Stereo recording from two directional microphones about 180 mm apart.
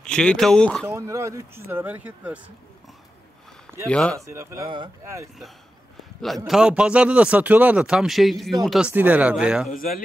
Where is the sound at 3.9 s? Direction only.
5° left (ahead or behind).